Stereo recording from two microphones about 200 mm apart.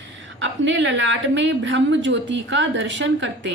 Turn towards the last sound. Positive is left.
turn(degrees=-65)  # may be behind; listen again after turning